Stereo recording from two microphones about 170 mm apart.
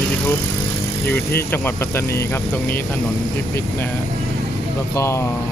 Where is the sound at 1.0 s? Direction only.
10° left (ahead or behind).